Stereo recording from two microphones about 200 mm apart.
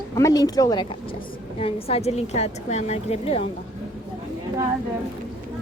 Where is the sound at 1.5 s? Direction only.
30° left (ahead or behind).